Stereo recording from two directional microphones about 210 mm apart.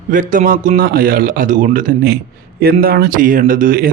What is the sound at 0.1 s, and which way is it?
A man's voice, 40° right (ahead or behind).